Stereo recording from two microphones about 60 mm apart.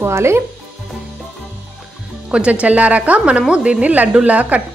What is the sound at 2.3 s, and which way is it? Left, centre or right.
Speech, right.